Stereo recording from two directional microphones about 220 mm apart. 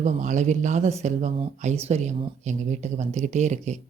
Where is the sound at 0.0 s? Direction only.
35° right (ahead or behind).